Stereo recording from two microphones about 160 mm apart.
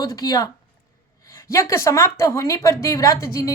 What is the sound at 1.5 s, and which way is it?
A woman's voice, 15° left (ahead or behind).